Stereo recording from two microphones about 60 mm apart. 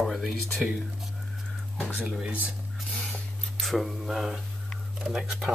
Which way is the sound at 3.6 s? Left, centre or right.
Centre.